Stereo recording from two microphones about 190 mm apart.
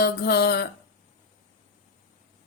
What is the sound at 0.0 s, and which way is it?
Speech, 55° left (ahead or behind).